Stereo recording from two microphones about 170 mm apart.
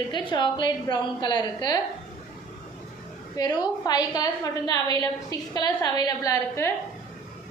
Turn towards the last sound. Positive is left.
turn(degrees=20)  # may be behind; listen again after turning